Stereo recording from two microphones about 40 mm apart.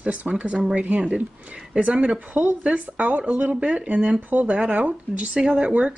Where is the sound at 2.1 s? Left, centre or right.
Right.